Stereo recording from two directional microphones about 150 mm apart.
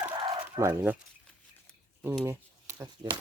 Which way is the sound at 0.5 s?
15° right (ahead or behind).